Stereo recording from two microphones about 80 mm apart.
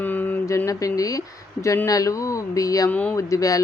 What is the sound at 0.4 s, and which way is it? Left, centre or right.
A woman's voice, left.